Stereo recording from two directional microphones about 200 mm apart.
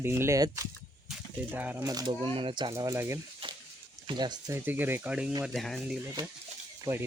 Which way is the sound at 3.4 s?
25° right (ahead or behind).